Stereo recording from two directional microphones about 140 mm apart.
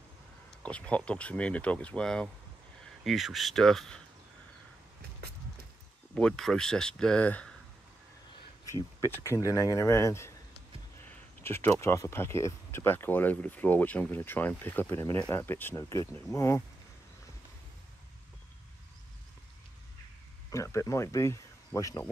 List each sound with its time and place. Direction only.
0.7 s speech: 10° left (ahead or behind)
6.1 s speech: 5° left (ahead or behind)
9.0 s speech: 20° left (ahead or behind)
20.4 s speech: 20° left (ahead or behind)